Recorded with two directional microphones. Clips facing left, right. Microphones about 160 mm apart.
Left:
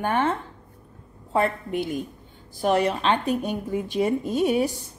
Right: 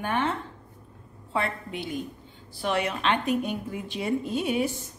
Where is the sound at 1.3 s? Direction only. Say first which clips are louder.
Left 6 dB; 45° left (ahead or behind).